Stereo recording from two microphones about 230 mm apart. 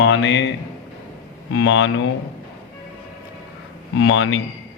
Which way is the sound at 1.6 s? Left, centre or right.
Left.